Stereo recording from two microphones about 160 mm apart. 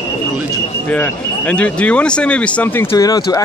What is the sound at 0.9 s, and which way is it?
Speech, 10° left (ahead or behind).